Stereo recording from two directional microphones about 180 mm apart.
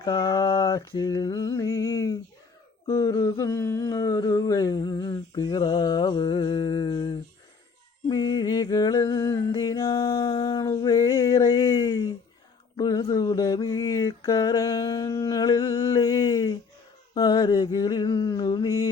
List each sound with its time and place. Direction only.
0.0 s humming: 20° left (ahead or behind)
8.0 s a sound: 25° left (ahead or behind)
12.7 s mantra: 20° left (ahead or behind)